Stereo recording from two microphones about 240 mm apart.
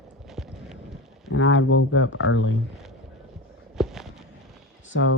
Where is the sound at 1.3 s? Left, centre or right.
Left.